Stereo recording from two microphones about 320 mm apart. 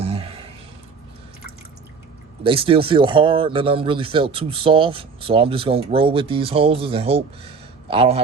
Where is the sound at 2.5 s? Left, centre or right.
Centre.